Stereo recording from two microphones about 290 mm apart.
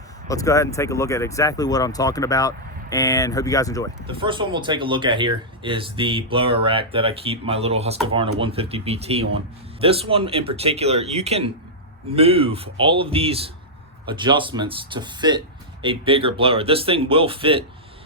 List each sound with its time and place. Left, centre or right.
0.3 s speech: centre
4.0 s speech: centre